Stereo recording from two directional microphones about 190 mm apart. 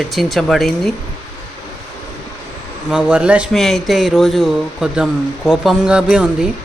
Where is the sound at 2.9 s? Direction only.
5° right (ahead or behind).